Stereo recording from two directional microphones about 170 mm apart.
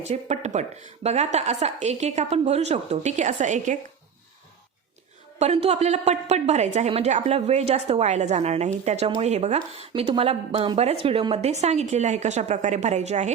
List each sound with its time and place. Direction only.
0.0 s a woman's voice: 40° right (ahead or behind)
5.4 s a woman's voice: 35° right (ahead or behind)